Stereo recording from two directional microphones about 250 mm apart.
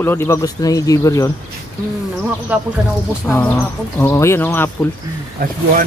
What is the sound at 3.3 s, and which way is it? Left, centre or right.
Speech, centre.